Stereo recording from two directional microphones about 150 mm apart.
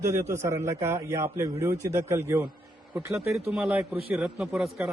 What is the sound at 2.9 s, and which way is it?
A man's voice, 5° right (ahead or behind).